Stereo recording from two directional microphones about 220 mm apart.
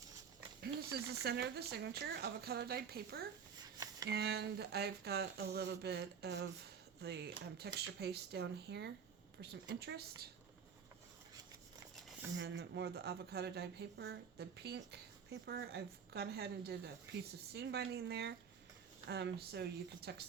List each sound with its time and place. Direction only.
0.6 s speech: 45° right (ahead or behind)
3.6 s a sound: 15° right (ahead or behind)
4.1 s speech: 45° right (ahead or behind)
12.4 s speech: 50° right (ahead or behind)